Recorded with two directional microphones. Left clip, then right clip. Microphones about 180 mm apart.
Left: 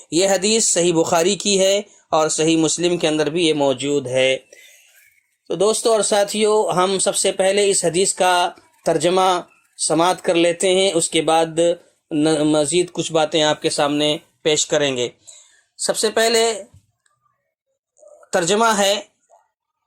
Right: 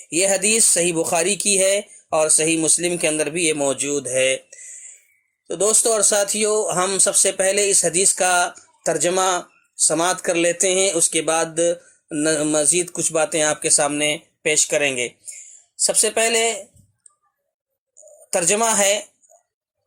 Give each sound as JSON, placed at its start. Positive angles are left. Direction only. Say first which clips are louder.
{"t": 0.1, "sound": "speech", "louder": "left 2 dB", "side_deg": 30}
{"t": 18.0, "sound": "speech", "louder": "left 2 dB", "side_deg": 25}